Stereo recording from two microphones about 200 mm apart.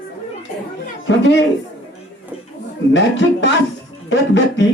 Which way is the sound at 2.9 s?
65° left (ahead or behind).